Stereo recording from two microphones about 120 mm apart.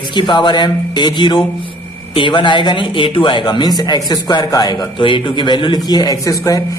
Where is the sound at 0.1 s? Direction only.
40° left (ahead or behind).